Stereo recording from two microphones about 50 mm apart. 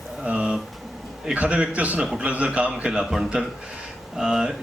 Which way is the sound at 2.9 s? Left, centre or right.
Centre.